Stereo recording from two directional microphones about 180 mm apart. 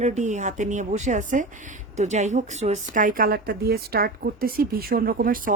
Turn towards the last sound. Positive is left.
turn(degrees=-50)  # may be behind; listen again after turning